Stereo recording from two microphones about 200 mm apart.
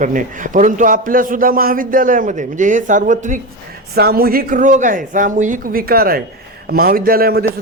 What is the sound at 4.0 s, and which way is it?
Speech, 50° right (ahead or behind).